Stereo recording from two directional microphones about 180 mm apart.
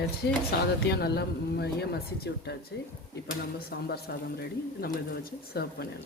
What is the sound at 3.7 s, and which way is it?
Speech, 60° left (ahead or behind).